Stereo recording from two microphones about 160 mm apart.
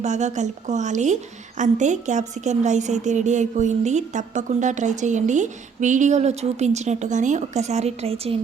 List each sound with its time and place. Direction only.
0.0 s a woman's voice: 45° right (ahead or behind)